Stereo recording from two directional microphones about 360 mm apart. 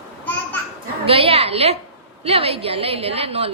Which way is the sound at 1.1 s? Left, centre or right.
Centre.